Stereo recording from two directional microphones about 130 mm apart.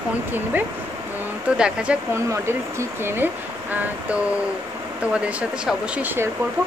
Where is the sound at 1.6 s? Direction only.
10° right (ahead or behind).